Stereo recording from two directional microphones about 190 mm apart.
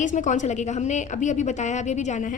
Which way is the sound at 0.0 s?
40° left (ahead or behind).